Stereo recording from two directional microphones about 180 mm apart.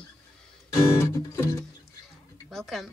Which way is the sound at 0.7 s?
15° left (ahead or behind).